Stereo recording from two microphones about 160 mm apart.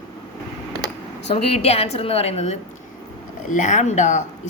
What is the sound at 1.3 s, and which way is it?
A woman's voice, 40° left (ahead or behind).